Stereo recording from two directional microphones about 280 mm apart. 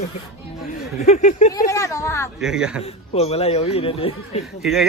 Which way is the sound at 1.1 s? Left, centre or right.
Left.